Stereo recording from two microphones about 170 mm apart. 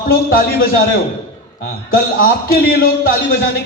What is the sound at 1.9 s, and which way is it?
A man's voice, 60° left (ahead or behind).